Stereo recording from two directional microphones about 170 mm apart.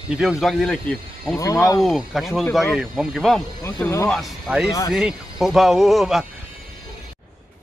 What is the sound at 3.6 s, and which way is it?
Speech, 15° left (ahead or behind).